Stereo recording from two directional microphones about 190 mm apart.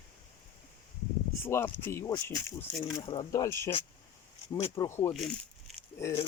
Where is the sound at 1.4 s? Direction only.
10° left (ahead or behind).